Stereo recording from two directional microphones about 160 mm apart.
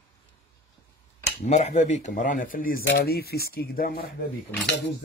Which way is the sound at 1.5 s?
45° left (ahead or behind).